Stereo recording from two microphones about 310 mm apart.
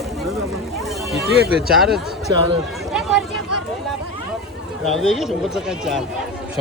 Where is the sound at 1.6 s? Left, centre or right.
Centre.